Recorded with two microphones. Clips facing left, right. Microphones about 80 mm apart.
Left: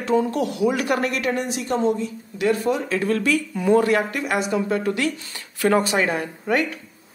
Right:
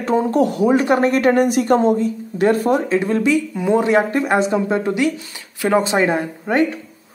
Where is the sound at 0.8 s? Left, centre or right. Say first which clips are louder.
Right 7 dB; right.